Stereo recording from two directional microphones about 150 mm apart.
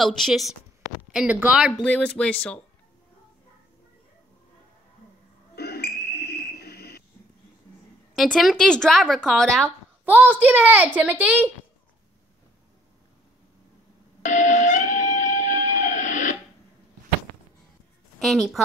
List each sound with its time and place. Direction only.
0.0 s a woman's voice: centre (ahead or behind)
1.8 s speech: 5° left (ahead or behind)
5.6 s whistle: 90° left
8.2 s a woman's voice: centre (ahead or behind)
10.0 s a child's voice: 10° right (ahead or behind)
14.2 s music: 55° left (ahead or behind)
18.2 s a woman's voice: centre (ahead or behind)